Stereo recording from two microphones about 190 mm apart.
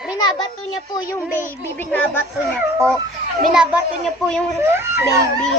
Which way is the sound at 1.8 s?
10° left (ahead or behind).